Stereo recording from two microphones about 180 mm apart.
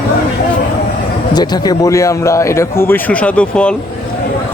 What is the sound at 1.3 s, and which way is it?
A man's voice, 20° left (ahead or behind).